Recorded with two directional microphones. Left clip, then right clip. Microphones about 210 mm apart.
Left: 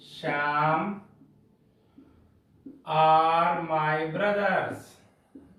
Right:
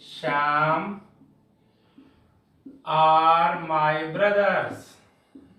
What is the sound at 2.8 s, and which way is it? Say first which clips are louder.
Mantra: right 3 dB; 5° right (ahead or behind).